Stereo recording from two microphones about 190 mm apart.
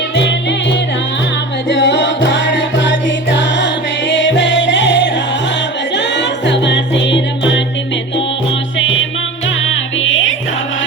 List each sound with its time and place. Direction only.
1.7 s music: 65° left (ahead or behind)
8.8 s music: 85° left